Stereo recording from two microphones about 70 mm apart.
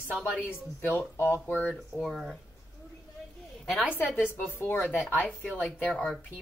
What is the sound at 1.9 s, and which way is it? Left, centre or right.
Speech, centre.